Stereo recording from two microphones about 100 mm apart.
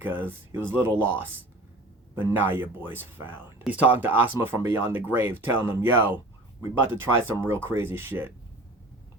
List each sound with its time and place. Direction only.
0.0 s speech: 15° right (ahead or behind)